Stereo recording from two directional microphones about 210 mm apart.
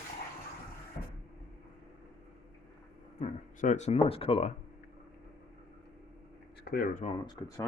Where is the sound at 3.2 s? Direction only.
35° left (ahead or behind).